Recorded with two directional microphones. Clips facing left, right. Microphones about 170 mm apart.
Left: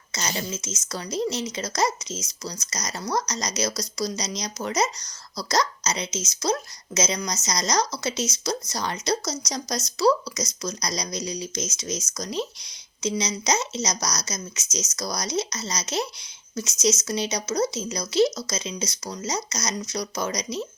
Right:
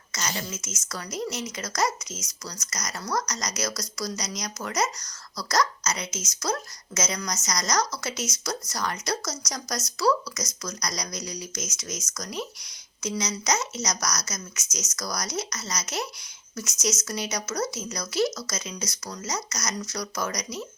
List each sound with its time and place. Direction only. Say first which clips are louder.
0.1 s a woman's voice: left 3 dB; 25° left (ahead or behind)